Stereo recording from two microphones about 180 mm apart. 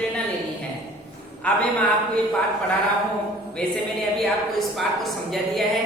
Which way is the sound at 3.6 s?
5° left (ahead or behind).